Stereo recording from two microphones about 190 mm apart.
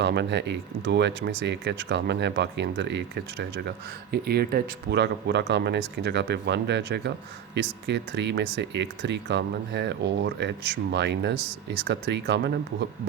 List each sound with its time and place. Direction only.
0.0 s speech: 60° right (ahead or behind)